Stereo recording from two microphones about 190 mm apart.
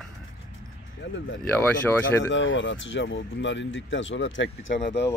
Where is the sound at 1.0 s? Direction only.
65° left (ahead or behind).